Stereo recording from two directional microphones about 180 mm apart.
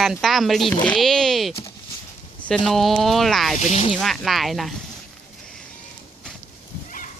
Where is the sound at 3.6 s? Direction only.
40° left (ahead or behind).